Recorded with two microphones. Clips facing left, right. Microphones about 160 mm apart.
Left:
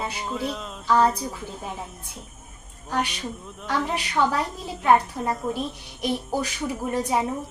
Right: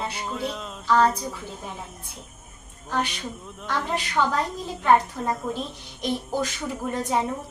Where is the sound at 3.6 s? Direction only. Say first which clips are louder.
Left 1 dB; 10° left (ahead or behind).